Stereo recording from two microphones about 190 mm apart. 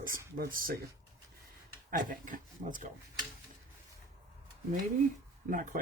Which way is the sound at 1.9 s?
45° right (ahead or behind).